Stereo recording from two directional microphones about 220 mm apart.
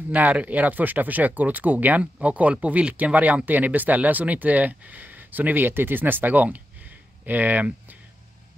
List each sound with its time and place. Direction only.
0.1 s speech: 5° right (ahead or behind)